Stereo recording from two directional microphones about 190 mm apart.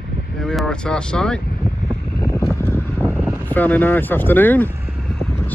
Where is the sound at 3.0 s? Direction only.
5° right (ahead or behind).